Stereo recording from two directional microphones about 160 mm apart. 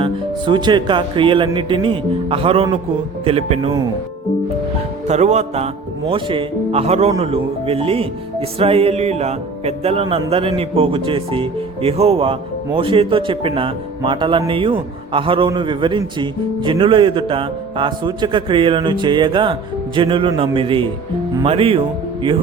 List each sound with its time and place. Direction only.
0.0 s speech: 30° right (ahead or behind)
5.0 s speech: 45° right (ahead or behind)